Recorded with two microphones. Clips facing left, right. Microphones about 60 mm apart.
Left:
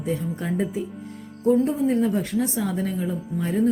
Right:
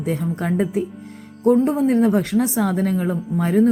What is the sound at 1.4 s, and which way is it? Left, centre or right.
A woman's voice, right.